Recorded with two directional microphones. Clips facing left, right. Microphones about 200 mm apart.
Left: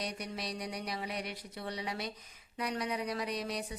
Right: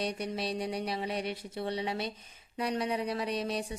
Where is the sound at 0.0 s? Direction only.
25° right (ahead or behind).